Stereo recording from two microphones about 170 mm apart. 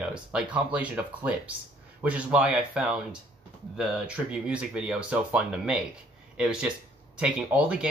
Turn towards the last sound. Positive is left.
turn(degrees=-10)  # may be behind; listen again after turning